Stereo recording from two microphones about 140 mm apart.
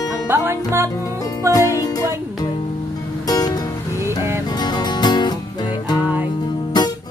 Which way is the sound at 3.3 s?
25° left (ahead or behind).